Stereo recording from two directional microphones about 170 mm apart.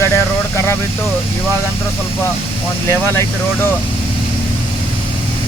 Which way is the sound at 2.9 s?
15° left (ahead or behind).